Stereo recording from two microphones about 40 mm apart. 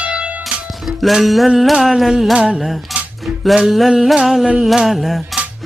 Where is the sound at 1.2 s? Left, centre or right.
Centre.